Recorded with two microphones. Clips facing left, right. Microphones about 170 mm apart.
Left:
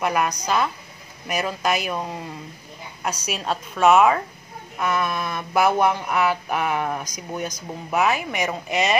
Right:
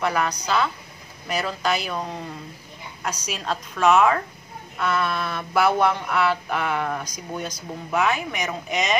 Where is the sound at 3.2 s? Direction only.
5° left (ahead or behind).